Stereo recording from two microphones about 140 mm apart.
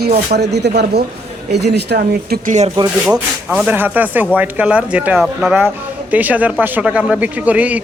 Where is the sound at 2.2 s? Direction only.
80° right; by 2.7 s 65° right (ahead or behind).